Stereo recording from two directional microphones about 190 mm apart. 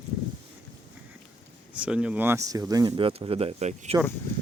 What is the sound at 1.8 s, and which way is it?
Speech, 5° right (ahead or behind).